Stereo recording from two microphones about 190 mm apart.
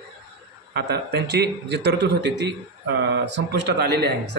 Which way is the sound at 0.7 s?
60° right (ahead or behind).